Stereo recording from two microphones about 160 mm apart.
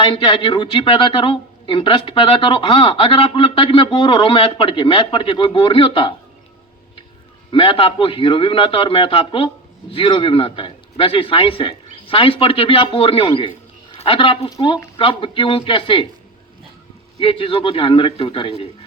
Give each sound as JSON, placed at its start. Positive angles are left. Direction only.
{"t": 0.0, "sound": "speech", "side_deg": 35}
{"t": 7.5, "sound": "speech", "side_deg": 35}
{"t": 17.2, "sound": "speech", "side_deg": 35}